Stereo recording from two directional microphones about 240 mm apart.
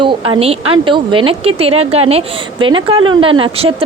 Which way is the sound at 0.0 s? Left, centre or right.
Right.